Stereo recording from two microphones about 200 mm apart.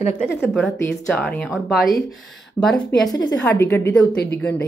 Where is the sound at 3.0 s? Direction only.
20° left (ahead or behind).